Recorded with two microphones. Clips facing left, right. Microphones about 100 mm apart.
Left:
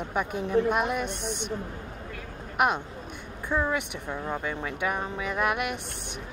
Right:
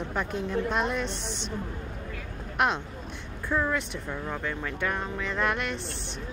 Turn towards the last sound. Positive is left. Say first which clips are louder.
# left 1 dB
turn(degrees=10)  # may be behind; listen again after turning